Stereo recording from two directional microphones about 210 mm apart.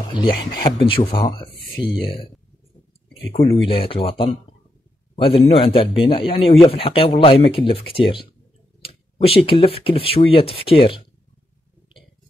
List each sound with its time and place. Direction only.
0.1 s speech: 20° left (ahead or behind)
1.8 s speech: 5° right (ahead or behind)
3.6 s a man's voice: 25° left (ahead or behind)